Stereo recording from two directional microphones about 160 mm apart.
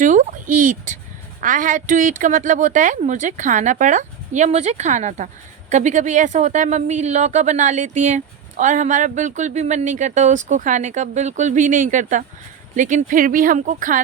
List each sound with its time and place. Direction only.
0.0 s speech: 50° right (ahead or behind)